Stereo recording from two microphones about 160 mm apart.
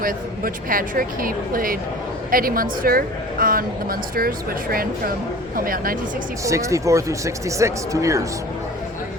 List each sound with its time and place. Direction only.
0.0 s a woman's voice: 60° right (ahead or behind)
6.4 s speech: 20° right (ahead or behind)